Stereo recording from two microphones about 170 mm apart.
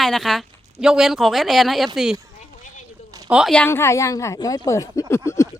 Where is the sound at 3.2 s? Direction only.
5° right (ahead or behind).